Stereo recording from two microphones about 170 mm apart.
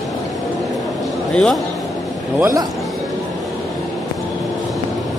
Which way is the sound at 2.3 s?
15° right (ahead or behind).